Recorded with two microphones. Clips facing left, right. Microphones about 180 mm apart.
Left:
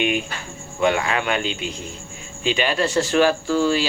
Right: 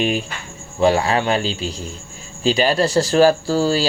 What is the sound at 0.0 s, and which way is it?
Speech, 35° right (ahead or behind).